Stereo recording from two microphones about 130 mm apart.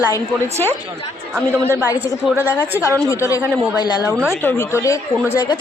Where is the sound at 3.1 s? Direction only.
25° left (ahead or behind).